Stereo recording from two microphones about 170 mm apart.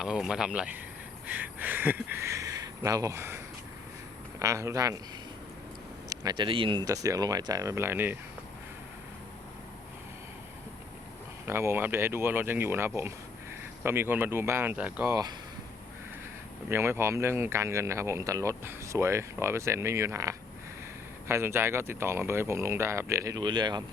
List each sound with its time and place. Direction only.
0.0 s speech: 5° right (ahead or behind); by 4.9 s 20° right (ahead or behind)
6.1 s speech: 25° right (ahead or behind)
11.4 s speech: 15° right (ahead or behind)
15.1 s speech: 25° right (ahead or behind)
16.6 s speech: 15° right (ahead or behind)